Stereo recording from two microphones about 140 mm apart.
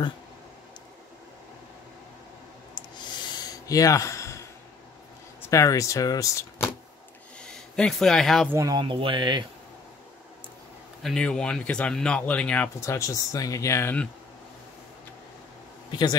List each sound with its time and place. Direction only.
2.7 s gasp: 30° left (ahead or behind)
5.4 s speech: 20° left (ahead or behind)
7.3 s speech: 5° left (ahead or behind)
8.5 s speech: 20° right (ahead or behind)
8.7 s speech: 35° right (ahead or behind)
11.0 s speech: 5° left (ahead or behind)
12.8 s speech: 20° left (ahead or behind)
15.9 s speech: 30° left (ahead or behind)